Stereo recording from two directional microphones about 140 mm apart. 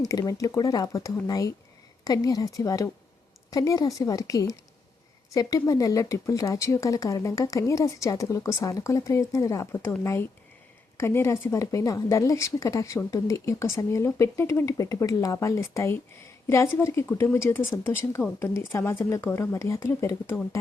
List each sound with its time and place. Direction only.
0.0 s a woman's voice: 25° left (ahead or behind)